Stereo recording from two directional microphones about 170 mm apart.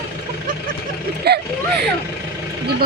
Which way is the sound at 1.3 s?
75° right (ahead or behind).